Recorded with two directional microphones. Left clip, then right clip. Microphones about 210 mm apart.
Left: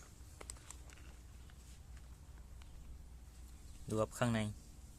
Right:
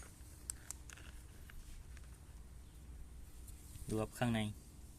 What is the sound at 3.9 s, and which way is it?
Speech, 25° left (ahead or behind).